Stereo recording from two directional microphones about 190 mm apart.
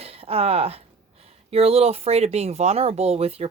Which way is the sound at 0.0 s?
30° right (ahead or behind).